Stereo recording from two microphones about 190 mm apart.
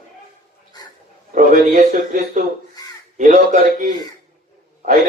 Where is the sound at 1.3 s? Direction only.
40° right (ahead or behind).